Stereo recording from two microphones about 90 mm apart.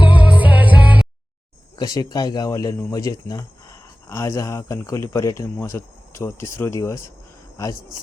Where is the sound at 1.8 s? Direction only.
45° left (ahead or behind); by 6.8 s 30° left (ahead or behind).